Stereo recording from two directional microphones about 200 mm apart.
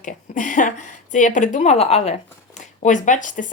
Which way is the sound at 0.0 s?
40° left (ahead or behind).